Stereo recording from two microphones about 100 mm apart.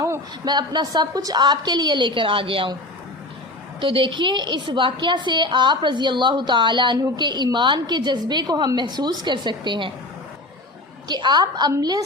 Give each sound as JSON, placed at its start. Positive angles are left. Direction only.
{"t": 0.4, "sound": "a woman's voice", "side_deg": -45}
{"t": 3.8, "sound": "a woman's voice", "side_deg": -60}
{"t": 11.1, "sound": "a woman's voice", "side_deg": -50}